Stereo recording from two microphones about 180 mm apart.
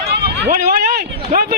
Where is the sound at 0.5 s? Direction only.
55° right (ahead or behind).